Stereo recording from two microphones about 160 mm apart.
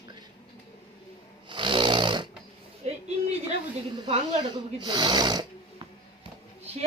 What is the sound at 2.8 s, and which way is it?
Speech, 40° right (ahead or behind).